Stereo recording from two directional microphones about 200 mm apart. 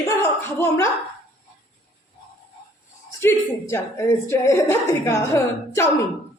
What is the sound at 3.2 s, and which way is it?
A woman's voice, 15° left (ahead or behind).